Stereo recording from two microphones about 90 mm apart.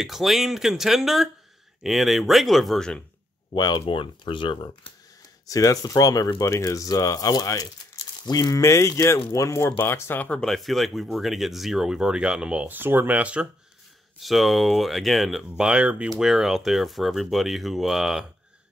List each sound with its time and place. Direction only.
0.0 s speech: centre (ahead or behind)
3.5 s speech: 50° left (ahead or behind)
3.8 s speech: 70° left (ahead or behind)
5.5 s speech: 40° left (ahead or behind); by 10.4 s 20° left (ahead or behind)
10.4 s speech: centre (ahead or behind); by 13.5 s 15° right (ahead or behind)
14.2 s speech: centre (ahead or behind)
15.4 s speech: 10° right (ahead or behind)